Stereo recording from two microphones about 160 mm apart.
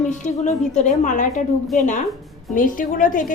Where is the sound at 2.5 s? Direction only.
55° left (ahead or behind).